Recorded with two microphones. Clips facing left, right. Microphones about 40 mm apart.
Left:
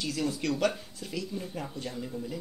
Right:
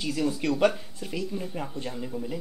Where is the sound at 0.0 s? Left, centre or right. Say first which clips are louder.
Right 3 dB; centre.